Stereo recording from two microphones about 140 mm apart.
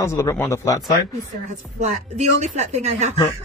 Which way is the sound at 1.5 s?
55° right (ahead or behind).